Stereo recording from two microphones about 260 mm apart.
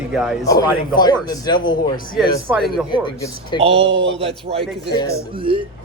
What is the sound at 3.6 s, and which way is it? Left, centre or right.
Speech, right.